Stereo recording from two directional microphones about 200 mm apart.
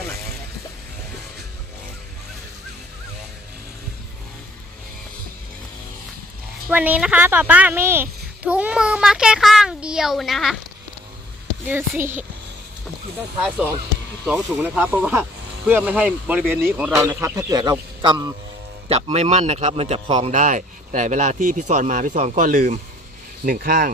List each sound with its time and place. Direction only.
6.7 s a woman's voice: 10° right (ahead or behind)
11.6 s speech: 10° right (ahead or behind)
14.3 s a man's voice: 5° right (ahead or behind); by 23.9 s 45° right (ahead or behind)